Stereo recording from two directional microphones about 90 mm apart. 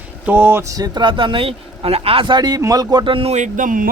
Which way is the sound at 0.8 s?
60° right (ahead or behind).